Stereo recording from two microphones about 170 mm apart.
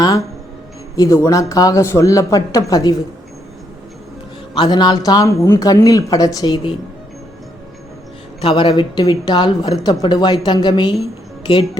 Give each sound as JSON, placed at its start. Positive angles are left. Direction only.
{"t": 0.9, "sound": "a woman's voice", "side_deg": 20}
{"t": 4.5, "sound": "a woman's voice", "side_deg": 25}
{"t": 8.4, "sound": "a woman's voice", "side_deg": 30}